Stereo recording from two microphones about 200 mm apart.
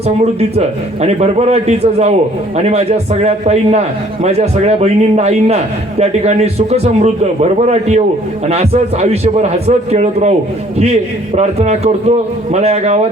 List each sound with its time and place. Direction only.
1.0 s a man's voice: 30° right (ahead or behind)